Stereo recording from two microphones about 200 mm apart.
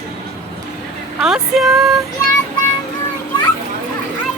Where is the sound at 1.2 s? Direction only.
Centre (ahead or behind).